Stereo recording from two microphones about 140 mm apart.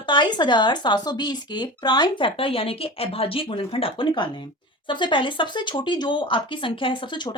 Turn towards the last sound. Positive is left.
turn(degrees=35)  # may be behind; listen again after turning